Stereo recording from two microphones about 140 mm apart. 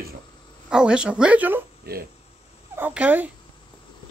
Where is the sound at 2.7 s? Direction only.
10° right (ahead or behind).